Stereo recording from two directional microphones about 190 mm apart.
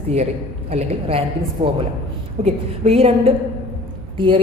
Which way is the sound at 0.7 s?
30° right (ahead or behind).